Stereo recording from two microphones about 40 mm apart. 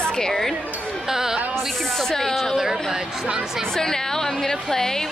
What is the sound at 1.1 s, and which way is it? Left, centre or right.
Speech, centre.